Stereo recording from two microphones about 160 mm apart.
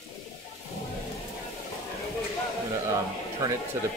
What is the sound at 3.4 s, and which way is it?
Speech, 20° right (ahead or behind).